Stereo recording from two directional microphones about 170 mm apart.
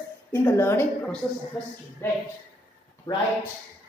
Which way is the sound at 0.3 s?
15° left (ahead or behind).